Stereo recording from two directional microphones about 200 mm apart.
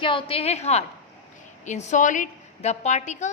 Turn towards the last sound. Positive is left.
turn(degrees=35)  # may be behind; listen again after turning